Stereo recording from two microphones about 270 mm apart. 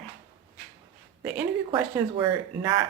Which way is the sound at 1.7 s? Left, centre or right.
Centre.